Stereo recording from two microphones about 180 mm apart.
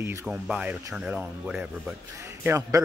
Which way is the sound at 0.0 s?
15° right (ahead or behind).